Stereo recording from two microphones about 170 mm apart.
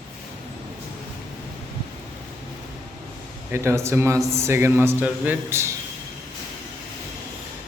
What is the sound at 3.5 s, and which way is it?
A man's voice, 15° right (ahead or behind).